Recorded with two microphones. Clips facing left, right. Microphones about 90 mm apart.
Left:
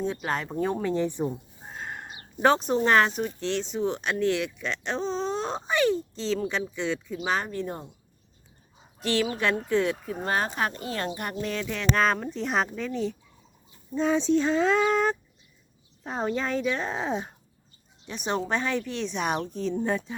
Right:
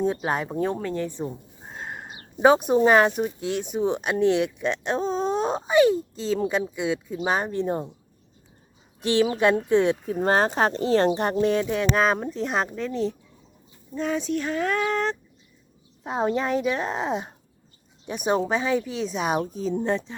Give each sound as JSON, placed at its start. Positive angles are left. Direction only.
{"t": 0.3, "sound": "speech", "side_deg": -15}
{"t": 0.6, "sound": "speech", "side_deg": 0}
{"t": 0.9, "sound": "speech", "side_deg": 15}
{"t": 1.7, "sound": "a sound", "side_deg": -5}
{"t": 2.4, "sound": "speech", "side_deg": -15}
{"t": 9.0, "sound": "speech", "side_deg": -20}
{"t": 10.2, "sound": "speech", "side_deg": -40}
{"t": 11.9, "sound": "speech", "side_deg": -5}
{"t": 13.9, "sound": "speech", "side_deg": 20}
{"t": 16.0, "sound": "speech", "side_deg": -15}